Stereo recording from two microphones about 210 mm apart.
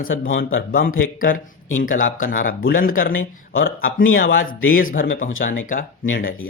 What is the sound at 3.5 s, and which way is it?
Speech, 70° left (ahead or behind).